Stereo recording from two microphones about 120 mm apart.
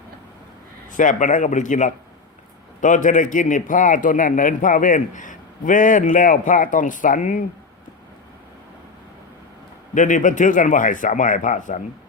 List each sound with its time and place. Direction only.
0.9 s a man's voice: 90° left
9.9 s a man's voice: 90° left